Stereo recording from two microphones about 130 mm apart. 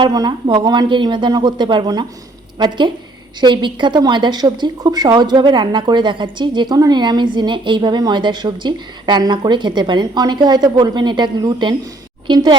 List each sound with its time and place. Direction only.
0.0 s speech: 35° right (ahead or behind)